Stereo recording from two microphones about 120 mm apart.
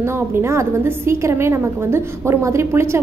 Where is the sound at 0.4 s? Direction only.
20° right (ahead or behind).